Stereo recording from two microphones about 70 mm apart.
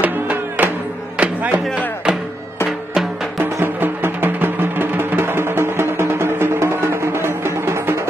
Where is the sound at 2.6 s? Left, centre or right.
Centre.